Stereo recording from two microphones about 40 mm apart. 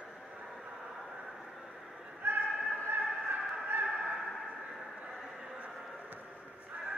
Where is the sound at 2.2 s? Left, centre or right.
Right.